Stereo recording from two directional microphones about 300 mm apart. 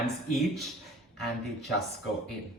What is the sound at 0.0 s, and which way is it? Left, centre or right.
Speech, centre.